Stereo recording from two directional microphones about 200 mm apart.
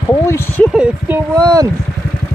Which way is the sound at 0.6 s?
5° right (ahead or behind).